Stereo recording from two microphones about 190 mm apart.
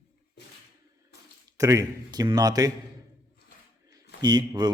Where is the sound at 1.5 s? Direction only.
15° right (ahead or behind).